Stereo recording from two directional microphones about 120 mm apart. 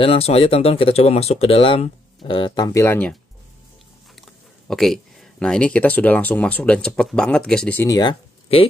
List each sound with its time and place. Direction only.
0.0 s speech: 55° left (ahead or behind); by 2.7 s 40° left (ahead or behind)
2.7 s speech: 25° left (ahead or behind)
4.6 s speech: 5° left (ahead or behind)
7.8 s speech: 35° left (ahead or behind)
8.5 s speech: 55° left (ahead or behind)